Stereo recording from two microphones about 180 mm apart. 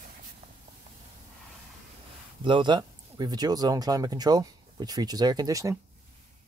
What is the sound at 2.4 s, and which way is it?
Speech, 25° right (ahead or behind).